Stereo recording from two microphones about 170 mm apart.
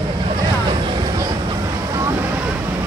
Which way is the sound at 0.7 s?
30° right (ahead or behind).